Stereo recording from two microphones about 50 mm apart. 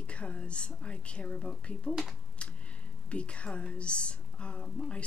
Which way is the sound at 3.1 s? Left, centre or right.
Left.